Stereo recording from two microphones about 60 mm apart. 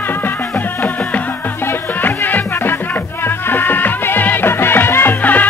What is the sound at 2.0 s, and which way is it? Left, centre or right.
Music, left.